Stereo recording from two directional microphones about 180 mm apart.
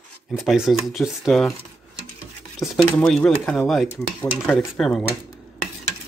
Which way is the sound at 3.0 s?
5° left (ahead or behind).